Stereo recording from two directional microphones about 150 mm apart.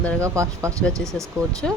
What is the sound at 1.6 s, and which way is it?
Speech, centre (ahead or behind).